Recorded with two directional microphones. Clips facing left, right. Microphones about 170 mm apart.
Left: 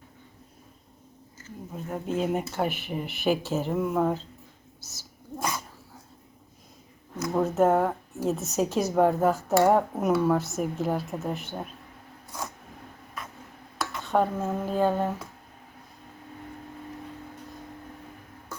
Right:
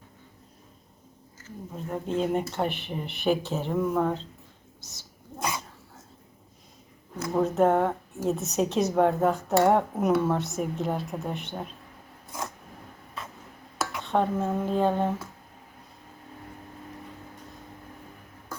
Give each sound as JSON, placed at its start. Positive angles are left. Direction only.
{"t": 1.7, "sound": "a woman's voice", "side_deg": 5}
{"t": 7.3, "sound": "a woman's voice", "side_deg": 0}
{"t": 13.2, "sound": "a sound", "side_deg": -25}
{"t": 13.7, "sound": "speech", "side_deg": 0}